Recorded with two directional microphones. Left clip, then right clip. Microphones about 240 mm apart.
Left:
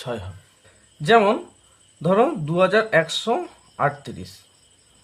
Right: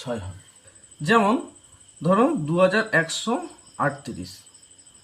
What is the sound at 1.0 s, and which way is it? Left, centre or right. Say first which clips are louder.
Speech: left 4 dB; left.